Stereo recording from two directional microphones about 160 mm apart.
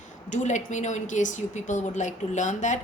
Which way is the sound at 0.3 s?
50° left (ahead or behind).